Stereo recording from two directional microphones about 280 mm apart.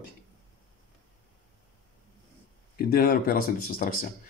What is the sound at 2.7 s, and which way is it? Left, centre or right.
Speech, left.